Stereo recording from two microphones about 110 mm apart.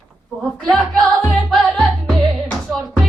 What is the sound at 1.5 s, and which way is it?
Music, 5° left (ahead or behind).